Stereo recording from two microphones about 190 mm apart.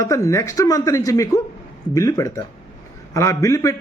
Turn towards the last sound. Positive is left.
turn(degrees=15)  # may be behind; listen again after turning